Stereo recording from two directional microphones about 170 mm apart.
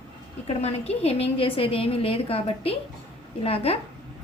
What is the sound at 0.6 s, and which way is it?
A woman's voice, 35° left (ahead or behind).